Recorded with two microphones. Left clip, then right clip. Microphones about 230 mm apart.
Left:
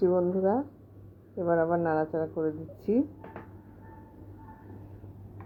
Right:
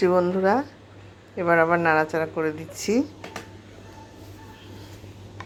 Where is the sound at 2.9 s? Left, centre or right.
Right.